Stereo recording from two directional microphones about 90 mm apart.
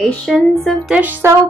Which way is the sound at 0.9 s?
20° right (ahead or behind).